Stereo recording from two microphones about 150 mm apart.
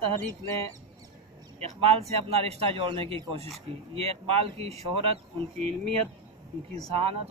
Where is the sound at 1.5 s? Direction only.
40° right (ahead or behind).